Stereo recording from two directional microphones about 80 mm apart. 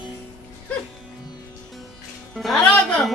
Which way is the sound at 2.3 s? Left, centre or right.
Centre.